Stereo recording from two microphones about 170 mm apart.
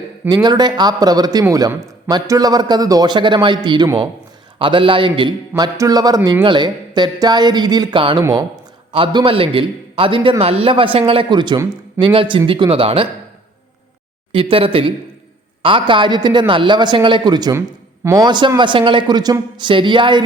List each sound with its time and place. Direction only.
0.4 s a man's voice: 25° right (ahead or behind)
8.9 s a man's voice: 30° right (ahead or behind)
14.5 s a man's voice: 30° right (ahead or behind)